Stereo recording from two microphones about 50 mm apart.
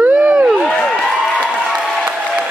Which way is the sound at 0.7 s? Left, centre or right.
Centre.